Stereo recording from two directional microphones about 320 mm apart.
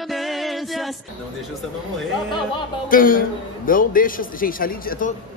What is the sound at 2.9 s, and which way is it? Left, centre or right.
A man's voice, left.